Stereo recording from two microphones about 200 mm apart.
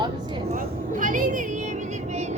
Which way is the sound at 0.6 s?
40° right (ahead or behind).